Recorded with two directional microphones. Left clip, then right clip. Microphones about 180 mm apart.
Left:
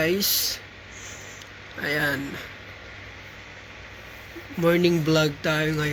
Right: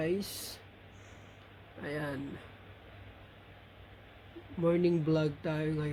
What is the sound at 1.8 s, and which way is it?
Speech, 5° right (ahead or behind).